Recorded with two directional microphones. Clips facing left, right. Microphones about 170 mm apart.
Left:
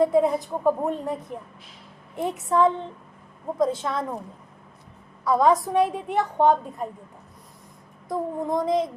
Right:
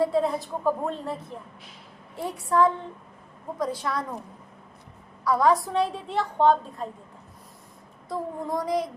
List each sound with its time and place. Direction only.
0.0 s a woman's voice: 20° left (ahead or behind)
2.1 s child singing: 20° left (ahead or behind)
5.2 s child singing: 20° left (ahead or behind)
5.6 s a woman's voice: 20° left (ahead or behind)
8.0 s child singing: 20° left (ahead or behind)